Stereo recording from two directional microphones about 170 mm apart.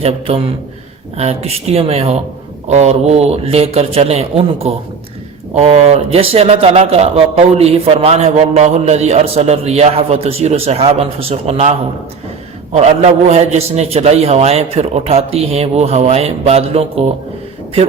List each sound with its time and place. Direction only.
0.0 s a man's voice: 35° right (ahead or behind)
12.7 s a man's voice: 40° right (ahead or behind)